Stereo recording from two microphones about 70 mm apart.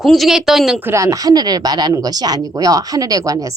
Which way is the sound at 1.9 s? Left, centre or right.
Right.